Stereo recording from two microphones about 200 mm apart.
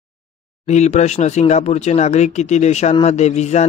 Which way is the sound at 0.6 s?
35° left (ahead or behind).